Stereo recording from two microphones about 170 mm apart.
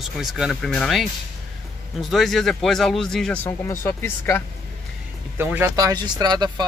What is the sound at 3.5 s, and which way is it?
Speech, 15° left (ahead or behind).